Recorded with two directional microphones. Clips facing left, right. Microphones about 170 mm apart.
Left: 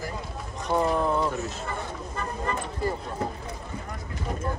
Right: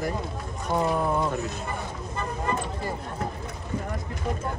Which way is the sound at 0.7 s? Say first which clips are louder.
Left 1 dB; 5° right (ahead or behind).